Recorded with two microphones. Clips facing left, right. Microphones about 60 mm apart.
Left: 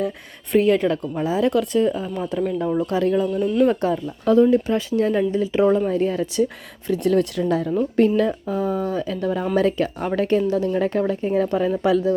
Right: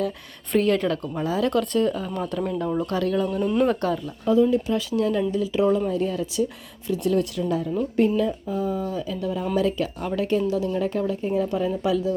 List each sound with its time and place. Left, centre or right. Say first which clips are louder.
0.5 s speech: left 4 dB; centre
2.9 s speech: left 4 dB; left
4.4 s speech: left 4 dB; left